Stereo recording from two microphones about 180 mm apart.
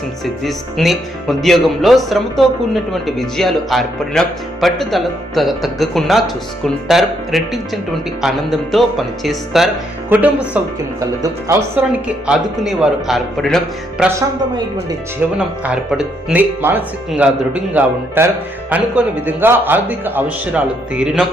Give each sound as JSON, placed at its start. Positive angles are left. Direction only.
{"t": 0.4, "sound": "a man's voice", "side_deg": 0}
{"t": 11.0, "sound": "speech", "side_deg": -20}
{"t": 12.0, "sound": "speech", "side_deg": -5}
{"t": 14.2, "sound": "speech", "side_deg": -20}
{"t": 15.4, "sound": "a man's voice", "side_deg": -5}